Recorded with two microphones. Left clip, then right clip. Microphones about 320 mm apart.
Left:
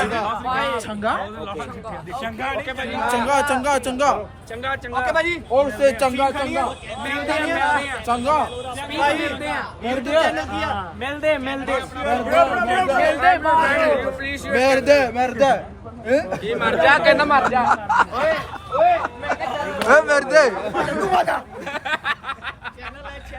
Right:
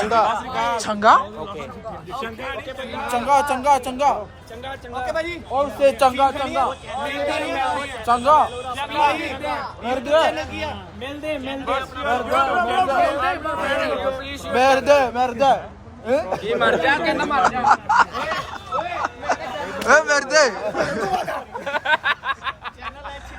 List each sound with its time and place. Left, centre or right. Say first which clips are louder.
0.1 s a sound: right 6 dB; right
0.8 s a man's voice: right 8 dB; centre
2.7 s a man's voice: left 1 dB; centre
5.8 s a man's voice: right 2 dB; centre
6.3 s a man's voice: right 1 dB; centre
8.0 s a man's voice: right 7 dB; centre
11.7 s a man's voice: right 1 dB; centre
14.5 s a man's voice: even; centre
16.9 s a man's voice: left 5 dB; centre
18.7 s a sound: left 8 dB; left
19.0 s speech: even; centre
21.1 s speech: left 5 dB; centre
21.7 s a sound: right 4 dB; centre